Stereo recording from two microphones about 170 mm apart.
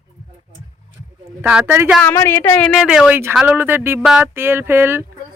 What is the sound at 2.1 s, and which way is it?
Speech, 15° left (ahead or behind).